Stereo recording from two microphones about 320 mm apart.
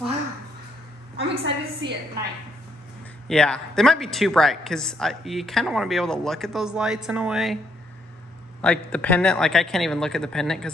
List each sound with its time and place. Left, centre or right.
1.1 s a woman's voice: centre
3.3 s speech: centre
8.5 s speech: centre